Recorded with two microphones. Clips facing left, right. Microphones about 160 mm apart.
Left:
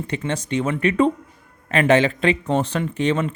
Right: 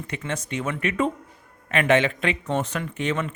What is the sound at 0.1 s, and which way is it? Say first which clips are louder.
Speech: left 6 dB; 30° left (ahead or behind).